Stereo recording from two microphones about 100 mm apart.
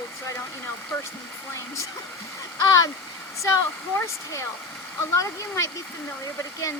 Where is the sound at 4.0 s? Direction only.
30° left (ahead or behind).